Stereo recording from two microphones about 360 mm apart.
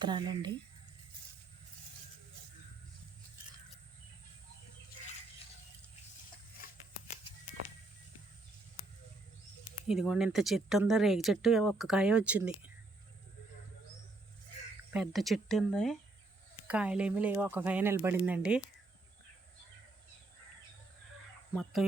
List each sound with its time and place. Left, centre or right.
0.0 s speech: centre
9.9 s speech: centre
14.9 s speech: centre
21.5 s speech: centre